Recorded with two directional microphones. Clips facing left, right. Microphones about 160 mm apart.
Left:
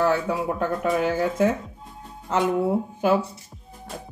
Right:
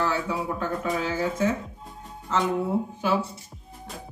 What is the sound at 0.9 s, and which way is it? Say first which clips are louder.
Speech: left 5 dB; 60° left (ahead or behind).